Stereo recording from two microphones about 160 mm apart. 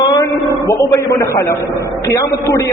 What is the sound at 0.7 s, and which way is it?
A man's voice, 20° left (ahead or behind).